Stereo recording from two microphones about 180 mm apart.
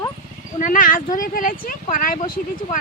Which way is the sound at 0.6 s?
50° left (ahead or behind).